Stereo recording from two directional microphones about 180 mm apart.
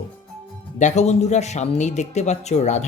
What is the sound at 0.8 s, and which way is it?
Speech, 40° left (ahead or behind).